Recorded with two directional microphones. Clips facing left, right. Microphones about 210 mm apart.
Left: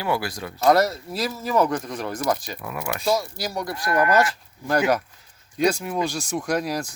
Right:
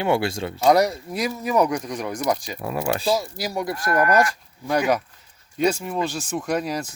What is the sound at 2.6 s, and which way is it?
Speech, 30° right (ahead or behind).